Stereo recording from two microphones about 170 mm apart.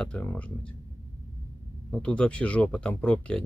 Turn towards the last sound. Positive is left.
turn(degrees=5)  # may be behind; listen again after turning